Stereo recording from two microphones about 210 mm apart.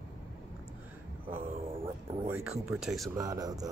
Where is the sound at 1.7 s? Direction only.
25° right (ahead or behind).